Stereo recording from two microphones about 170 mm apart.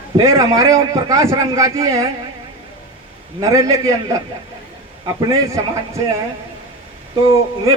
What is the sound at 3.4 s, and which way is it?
Speech, 20° right (ahead or behind).